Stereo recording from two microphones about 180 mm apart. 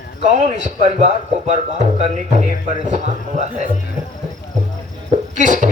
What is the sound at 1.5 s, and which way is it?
Speech, 40° right (ahead or behind).